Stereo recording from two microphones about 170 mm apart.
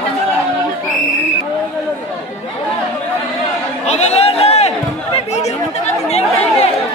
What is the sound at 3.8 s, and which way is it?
Chatter, 40° left (ahead or behind).